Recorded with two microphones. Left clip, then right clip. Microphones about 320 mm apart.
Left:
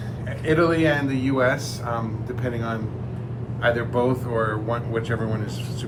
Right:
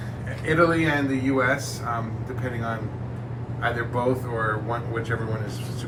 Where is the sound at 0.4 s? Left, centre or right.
Left.